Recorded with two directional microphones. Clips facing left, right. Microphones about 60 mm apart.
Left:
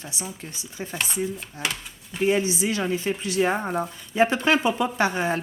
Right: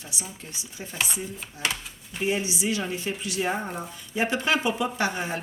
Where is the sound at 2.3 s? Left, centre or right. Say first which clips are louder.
Left 4 dB; left.